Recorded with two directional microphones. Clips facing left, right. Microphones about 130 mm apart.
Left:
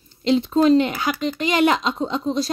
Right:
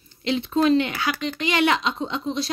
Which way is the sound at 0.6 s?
40° left (ahead or behind).